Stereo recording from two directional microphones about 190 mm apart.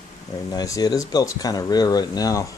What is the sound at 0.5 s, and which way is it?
Speech, 20° left (ahead or behind).